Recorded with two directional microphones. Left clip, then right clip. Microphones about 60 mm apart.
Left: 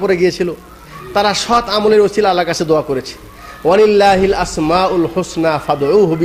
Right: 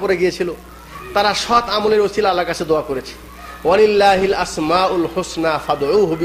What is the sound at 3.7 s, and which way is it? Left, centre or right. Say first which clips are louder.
A man's voice: left 3 dB; centre.